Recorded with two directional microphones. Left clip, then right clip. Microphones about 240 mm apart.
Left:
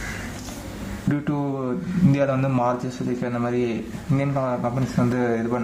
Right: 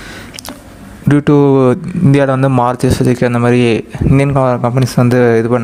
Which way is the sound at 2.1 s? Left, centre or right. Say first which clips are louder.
Right 12 dB; right.